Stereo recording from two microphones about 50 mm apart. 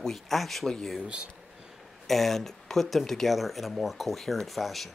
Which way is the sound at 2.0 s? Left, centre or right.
Centre.